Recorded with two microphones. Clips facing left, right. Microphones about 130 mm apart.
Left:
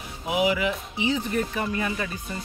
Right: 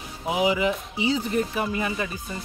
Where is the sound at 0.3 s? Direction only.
25° right (ahead or behind).